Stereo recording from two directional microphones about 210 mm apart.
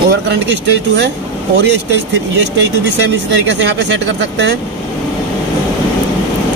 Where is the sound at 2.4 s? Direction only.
55° right (ahead or behind).